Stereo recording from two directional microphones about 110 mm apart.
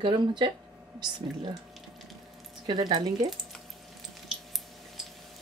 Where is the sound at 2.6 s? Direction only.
40° right (ahead or behind).